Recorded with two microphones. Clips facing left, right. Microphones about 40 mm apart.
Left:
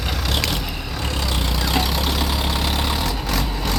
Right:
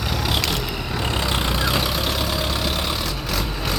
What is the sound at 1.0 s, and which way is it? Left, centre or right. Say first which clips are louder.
Vehicle: right 2 dB; right.